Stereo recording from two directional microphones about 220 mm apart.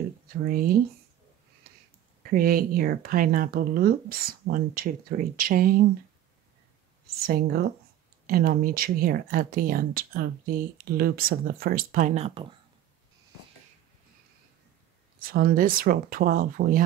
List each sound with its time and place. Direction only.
0.5 s speech: 40° right (ahead or behind)
2.2 s speech: 40° right (ahead or behind)
7.2 s speech: 40° right (ahead or behind)
15.1 s speech: 40° right (ahead or behind)